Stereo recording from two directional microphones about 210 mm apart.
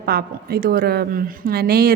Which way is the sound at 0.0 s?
45° right (ahead or behind).